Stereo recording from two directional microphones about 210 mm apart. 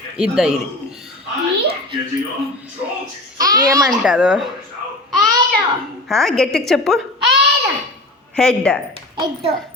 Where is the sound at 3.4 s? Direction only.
15° right (ahead or behind).